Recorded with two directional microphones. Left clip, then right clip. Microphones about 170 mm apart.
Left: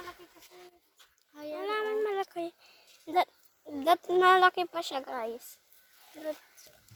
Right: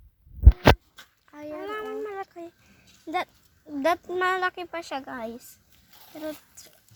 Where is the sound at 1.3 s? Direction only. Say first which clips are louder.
Right 2 dB; 15° left (ahead or behind).